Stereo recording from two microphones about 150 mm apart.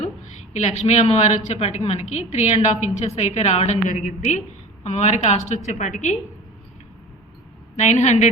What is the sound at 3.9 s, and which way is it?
A woman's voice, 60° left (ahead or behind).